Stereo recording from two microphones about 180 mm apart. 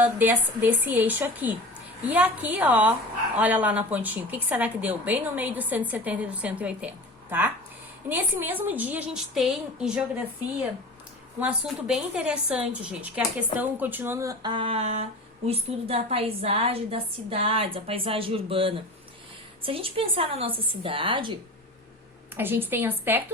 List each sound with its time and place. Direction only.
0.0 s a woman's voice: 10° right (ahead or behind)
11.3 s a woman's voice: 5° right (ahead or behind); by 21.3 s 30° right (ahead or behind)
22.4 s a woman's voice: 10° right (ahead or behind)